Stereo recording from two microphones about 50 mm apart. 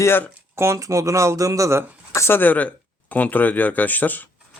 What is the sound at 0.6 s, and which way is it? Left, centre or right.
Speech, right.